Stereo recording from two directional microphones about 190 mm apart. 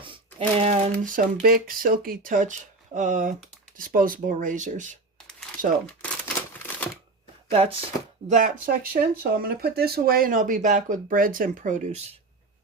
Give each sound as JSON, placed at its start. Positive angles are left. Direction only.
{"t": 0.0, "sound": "speech", "side_deg": -30}
{"t": 6.0, "sound": "a sound", "side_deg": 5}
{"t": 7.5, "sound": "speech", "side_deg": -30}
{"t": 8.3, "sound": "speech", "side_deg": -45}